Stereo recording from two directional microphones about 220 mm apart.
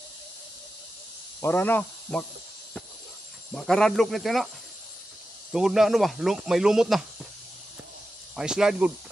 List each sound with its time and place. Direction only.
1.4 s speech: 10° left (ahead or behind)
3.5 s speech: 5° left (ahead or behind)
5.5 s speech: centre (ahead or behind)
8.4 s speech: centre (ahead or behind)